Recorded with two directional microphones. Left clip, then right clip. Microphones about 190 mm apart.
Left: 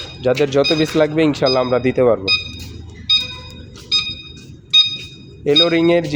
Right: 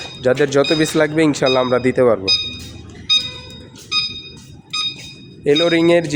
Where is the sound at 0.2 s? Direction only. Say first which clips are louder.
Right 1 dB; 15° right (ahead or behind).